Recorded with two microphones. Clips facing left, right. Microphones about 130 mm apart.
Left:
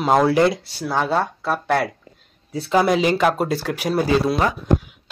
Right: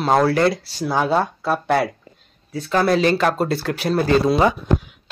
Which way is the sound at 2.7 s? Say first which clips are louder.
Even; 15° left (ahead or behind).